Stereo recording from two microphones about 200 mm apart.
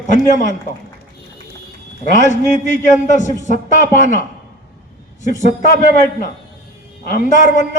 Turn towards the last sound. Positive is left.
turn(degrees=40)  # may be behind; listen again after turning